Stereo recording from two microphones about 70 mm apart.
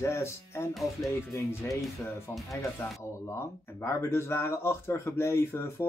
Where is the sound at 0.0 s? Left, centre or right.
Left.